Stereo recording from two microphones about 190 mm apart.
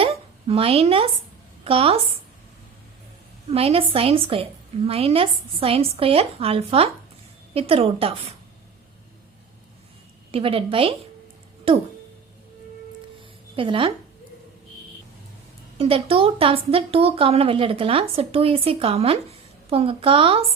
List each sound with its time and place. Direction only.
0.0 s a sound: 30° right (ahead or behind)
1.6 s a woman's voice: 30° right (ahead or behind)
3.5 s a woman's voice: 30° right (ahead or behind)
10.3 s a woman's voice: 30° right (ahead or behind)
13.6 s a woman's voice: 25° right (ahead or behind)
15.8 s a woman's voice: 30° right (ahead or behind)